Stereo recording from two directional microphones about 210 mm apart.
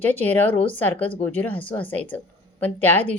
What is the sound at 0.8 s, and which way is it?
A woman's voice, 10° left (ahead or behind).